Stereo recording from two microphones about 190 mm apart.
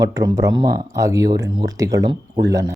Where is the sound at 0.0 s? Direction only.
20° right (ahead or behind).